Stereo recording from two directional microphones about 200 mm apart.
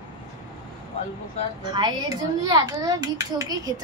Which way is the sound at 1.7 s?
20° right (ahead or behind).